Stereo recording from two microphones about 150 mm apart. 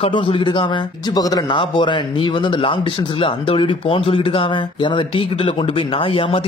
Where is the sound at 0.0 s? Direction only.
35° left (ahead or behind).